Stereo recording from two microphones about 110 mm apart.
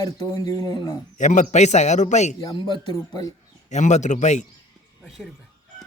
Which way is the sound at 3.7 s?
90° left.